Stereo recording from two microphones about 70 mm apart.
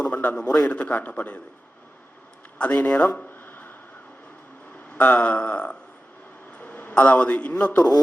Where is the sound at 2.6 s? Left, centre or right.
Left.